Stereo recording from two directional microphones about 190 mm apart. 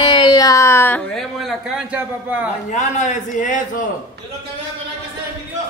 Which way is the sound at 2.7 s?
40° left (ahead or behind).